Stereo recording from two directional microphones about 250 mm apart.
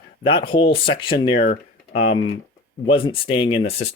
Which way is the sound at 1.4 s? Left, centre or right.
Left.